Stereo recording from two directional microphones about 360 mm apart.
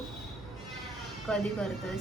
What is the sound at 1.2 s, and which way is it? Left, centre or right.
Speech, centre.